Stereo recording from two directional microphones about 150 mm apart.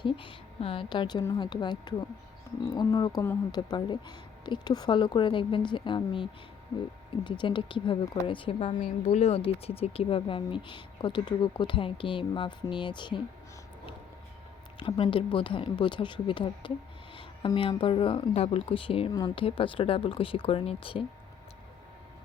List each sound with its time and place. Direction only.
0.0 s speech: 35° left (ahead or behind)
7.3 s speech: 30° left (ahead or behind)
14.8 s speech: 35° left (ahead or behind)
19.1 s speech: 25° left (ahead or behind)